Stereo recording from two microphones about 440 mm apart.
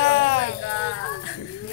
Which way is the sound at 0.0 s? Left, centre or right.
Left.